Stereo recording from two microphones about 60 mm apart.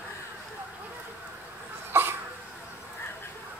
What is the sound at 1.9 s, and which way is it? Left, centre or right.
Cough, right.